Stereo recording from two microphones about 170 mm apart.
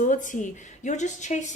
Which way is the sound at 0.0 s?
50° left (ahead or behind).